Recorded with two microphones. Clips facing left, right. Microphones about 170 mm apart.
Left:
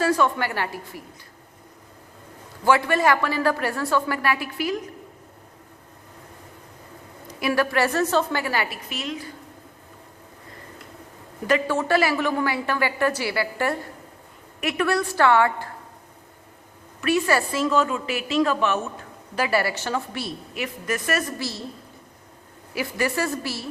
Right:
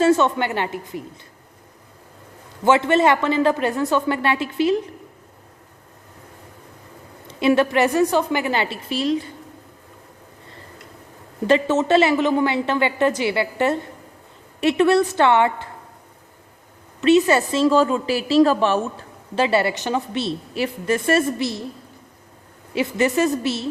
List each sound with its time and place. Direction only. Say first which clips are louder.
0.0 s a woman's voice: right 5 dB; 25° right (ahead or behind)
2.6 s a woman's voice: right 4 dB; 20° right (ahead or behind)
7.3 s a woman's voice: right 6 dB; 25° right (ahead or behind)
11.4 s a woman's voice: right 5 dB; 25° right (ahead or behind)
17.0 s a woman's voice: right 6 dB; 20° right (ahead or behind)
22.7 s a woman's voice: right 6 dB; 25° right (ahead or behind)